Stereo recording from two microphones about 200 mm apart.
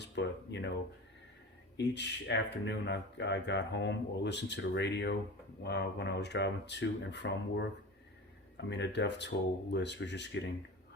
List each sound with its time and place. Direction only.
0.2 s speech: 60° left (ahead or behind)
1.7 s speech: 60° left (ahead or behind)